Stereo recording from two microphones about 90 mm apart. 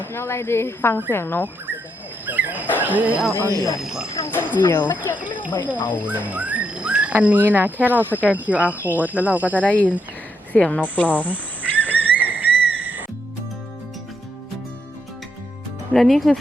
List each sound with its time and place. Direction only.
0.0 s speech: 25° left (ahead or behind)
2.2 s wild animals: 20° right (ahead or behind)
2.8 s speech: 15° right (ahead or behind)
3.3 s speech: 35° right (ahead or behind)
3.8 s speech: 5° right (ahead or behind)
4.3 s speech: 20° left (ahead or behind)
6.0 s speech: 15° right (ahead or behind)
9.6 s speech: 20° left (ahead or behind)
12.1 s whistle: 20° right (ahead or behind)
15.9 s speech: 5° left (ahead or behind)